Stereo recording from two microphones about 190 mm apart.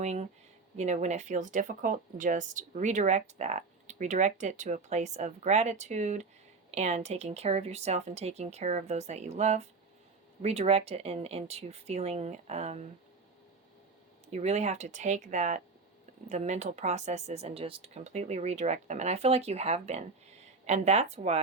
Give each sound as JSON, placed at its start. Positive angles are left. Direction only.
{"t": 0.0, "sound": "speech", "side_deg": -35}
{"t": 14.3, "sound": "speech", "side_deg": -35}